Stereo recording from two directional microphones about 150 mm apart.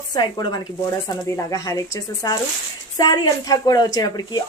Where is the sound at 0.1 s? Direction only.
30° left (ahead or behind).